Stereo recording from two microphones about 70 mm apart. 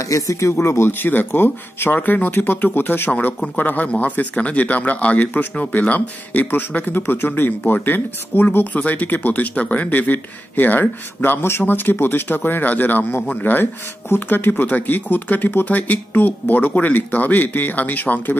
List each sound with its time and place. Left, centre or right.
0.1 s a man's voice: left